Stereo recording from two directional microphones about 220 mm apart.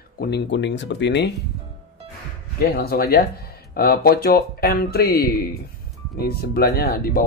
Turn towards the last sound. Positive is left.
turn(degrees=40)  # may be behind; listen again after turning